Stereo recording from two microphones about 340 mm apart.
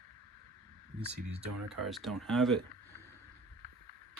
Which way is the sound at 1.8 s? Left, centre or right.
Centre.